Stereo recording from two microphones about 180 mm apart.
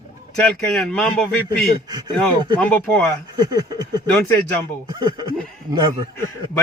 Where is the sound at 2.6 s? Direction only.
10° left (ahead or behind).